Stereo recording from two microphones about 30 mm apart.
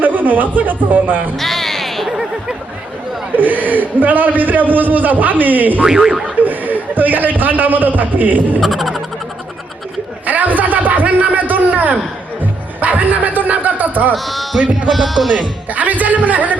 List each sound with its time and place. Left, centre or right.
0.0 s a man's voice: right
1.4 s a sound: centre
2.0 s a sound: centre
3.3 s a man's voice: right
5.8 s speech: centre
6.4 s a man's voice: right
8.6 s music: centre
10.2 s a sound: right
12.4 s music: right
14.3 s speech: centre
15.7 s a man's voice: right